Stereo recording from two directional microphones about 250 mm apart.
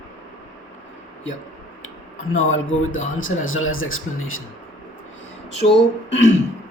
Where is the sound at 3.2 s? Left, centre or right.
Left.